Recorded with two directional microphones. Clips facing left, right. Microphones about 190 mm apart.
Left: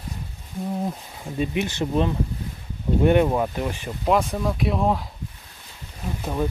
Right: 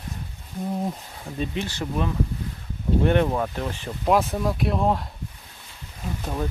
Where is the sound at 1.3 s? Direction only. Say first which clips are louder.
Left 4 dB; 15° left (ahead or behind).